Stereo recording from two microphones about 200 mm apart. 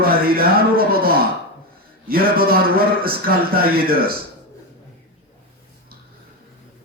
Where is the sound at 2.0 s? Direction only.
50° right (ahead or behind).